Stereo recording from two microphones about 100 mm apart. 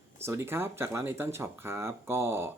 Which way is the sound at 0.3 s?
25° right (ahead or behind).